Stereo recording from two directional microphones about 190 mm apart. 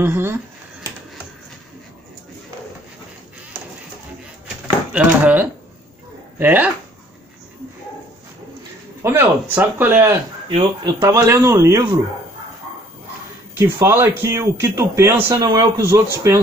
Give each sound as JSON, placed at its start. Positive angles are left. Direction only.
{"t": 0.0, "sound": "speech", "side_deg": -10}
{"t": 4.9, "sound": "speech", "side_deg": -10}
{"t": 9.0, "sound": "speech", "side_deg": -10}
{"t": 10.5, "sound": "speech", "side_deg": -20}
{"t": 13.6, "sound": "speech", "side_deg": -15}